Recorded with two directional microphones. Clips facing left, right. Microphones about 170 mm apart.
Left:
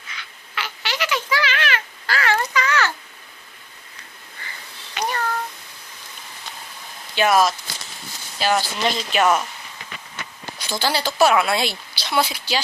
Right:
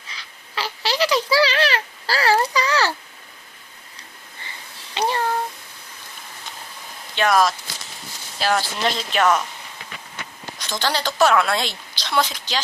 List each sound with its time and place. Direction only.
0.1 s babbling: 35° right (ahead or behind)
4.9 s a sound: 30° right (ahead or behind)
7.2 s speech: 5° left (ahead or behind)
10.6 s a woman's voice: 10° left (ahead or behind)